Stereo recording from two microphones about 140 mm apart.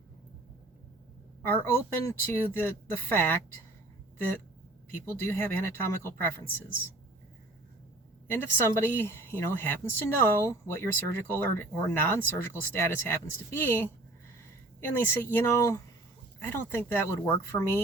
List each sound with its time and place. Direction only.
1.4 s a woman's voice: 15° left (ahead or behind)
5.0 s a woman's voice: 15° left (ahead or behind)
8.3 s a woman's voice: 15° left (ahead or behind)